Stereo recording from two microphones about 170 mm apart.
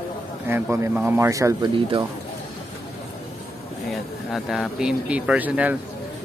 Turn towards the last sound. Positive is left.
turn(degrees=-10)  # may be behind; listen again after turning